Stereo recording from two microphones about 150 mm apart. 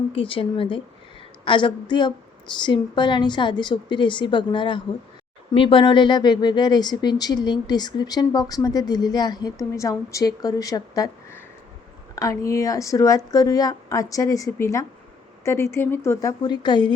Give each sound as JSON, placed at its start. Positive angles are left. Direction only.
{"t": 0.1, "sound": "a woman's voice", "side_deg": 35}